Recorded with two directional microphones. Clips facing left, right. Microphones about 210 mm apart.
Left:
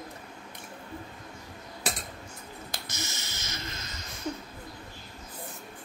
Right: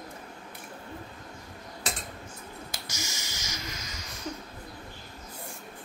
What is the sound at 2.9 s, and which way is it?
Finger snapping, 55° left (ahead or behind).